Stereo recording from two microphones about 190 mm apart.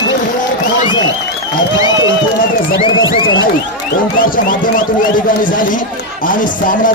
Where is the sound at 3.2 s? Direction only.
90° left.